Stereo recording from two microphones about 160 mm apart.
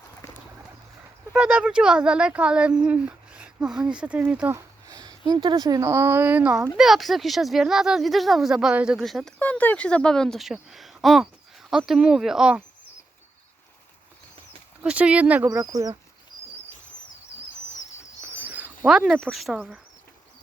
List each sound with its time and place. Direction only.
1.3 s speech: 5° right (ahead or behind)
4.9 s speech: 25° right (ahead or behind); by 12.6 s 5° right (ahead or behind)
14.8 s speech: 5° right (ahead or behind)
15.4 s speech: 20° right (ahead or behind)
18.3 s a sound: 10° right (ahead or behind)
19.5 s speech: 5° right (ahead or behind)